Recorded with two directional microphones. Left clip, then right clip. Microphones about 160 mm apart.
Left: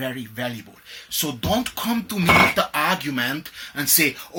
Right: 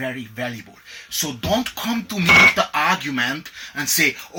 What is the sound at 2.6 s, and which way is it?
Speech, 15° left (ahead or behind).